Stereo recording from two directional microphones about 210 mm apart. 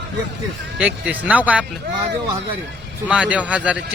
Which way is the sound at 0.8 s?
5° right (ahead or behind).